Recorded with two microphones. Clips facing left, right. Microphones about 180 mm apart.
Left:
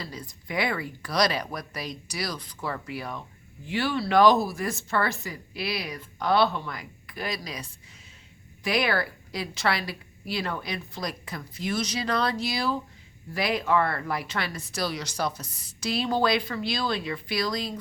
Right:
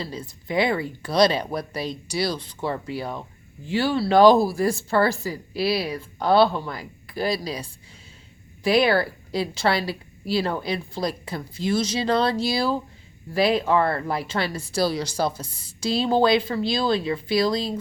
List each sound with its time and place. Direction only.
0.0 s speech: 25° right (ahead or behind)